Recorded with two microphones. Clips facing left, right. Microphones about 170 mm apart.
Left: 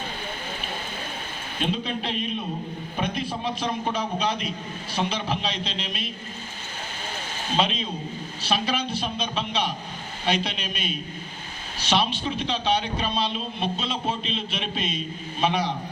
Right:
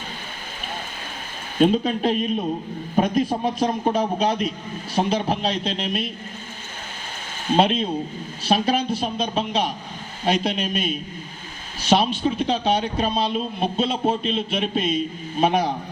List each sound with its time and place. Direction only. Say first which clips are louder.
1.5 s a man's voice: right 10 dB; 45° right (ahead or behind)
7.5 s a man's voice: right 7 dB; 55° right (ahead or behind)